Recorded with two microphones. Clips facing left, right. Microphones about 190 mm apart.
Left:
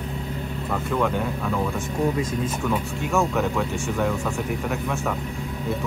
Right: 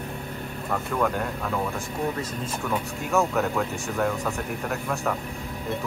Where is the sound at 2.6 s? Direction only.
Centre (ahead or behind).